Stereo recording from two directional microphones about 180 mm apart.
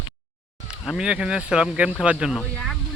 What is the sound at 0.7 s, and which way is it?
Speech, 5° right (ahead or behind).